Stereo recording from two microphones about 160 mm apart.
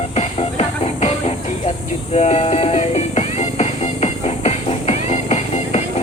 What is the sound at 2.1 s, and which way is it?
Music, 40° left (ahead or behind).